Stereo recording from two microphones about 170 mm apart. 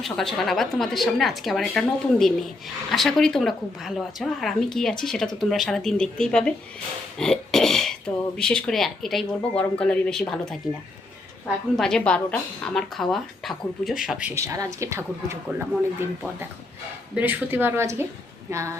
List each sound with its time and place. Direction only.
0.0 s speech: centre (ahead or behind)
11.8 s speech: 5° left (ahead or behind); by 15.6 s 15° right (ahead or behind)
17.2 s speech: 10° right (ahead or behind)